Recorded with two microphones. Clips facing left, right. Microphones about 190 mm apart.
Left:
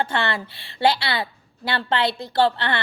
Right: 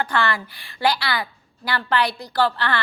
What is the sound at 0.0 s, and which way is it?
A woman's voice, 25° left (ahead or behind).